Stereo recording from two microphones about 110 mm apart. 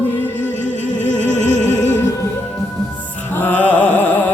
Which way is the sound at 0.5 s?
90° left.